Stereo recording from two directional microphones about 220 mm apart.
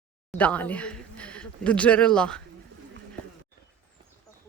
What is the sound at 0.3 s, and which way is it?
Speech, 5° left (ahead or behind).